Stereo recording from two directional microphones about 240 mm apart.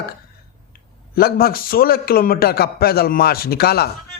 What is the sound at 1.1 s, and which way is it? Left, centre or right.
A man's voice, left.